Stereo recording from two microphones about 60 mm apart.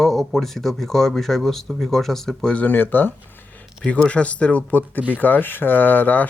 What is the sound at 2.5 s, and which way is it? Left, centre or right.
Speech, left.